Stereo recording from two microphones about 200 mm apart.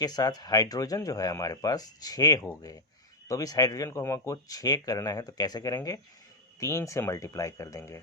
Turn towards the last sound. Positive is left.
turn(degrees=15)  # may be behind; listen again after turning